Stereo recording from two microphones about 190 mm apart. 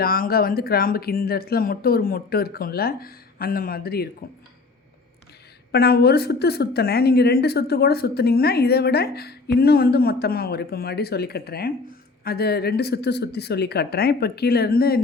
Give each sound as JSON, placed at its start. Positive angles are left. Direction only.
{"t": 0.0, "sound": "speech", "side_deg": 50}
{"t": 5.7, "sound": "speech", "side_deg": 55}